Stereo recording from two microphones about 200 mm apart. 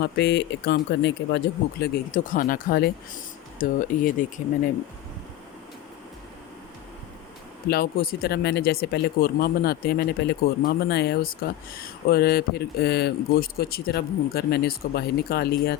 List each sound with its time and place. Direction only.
0.0 s speech: 55° left (ahead or behind)
2.1 s speech: 40° left (ahead or behind)
7.7 s speech: 50° left (ahead or behind)